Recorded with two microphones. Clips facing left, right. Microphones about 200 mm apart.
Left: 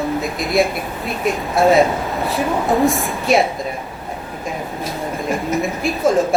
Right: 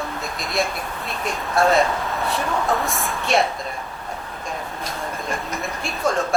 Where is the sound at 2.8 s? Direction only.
Centre (ahead or behind).